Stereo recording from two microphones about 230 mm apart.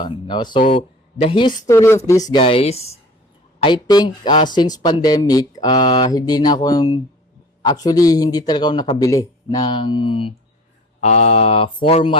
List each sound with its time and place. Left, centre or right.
0.0 s speech: centre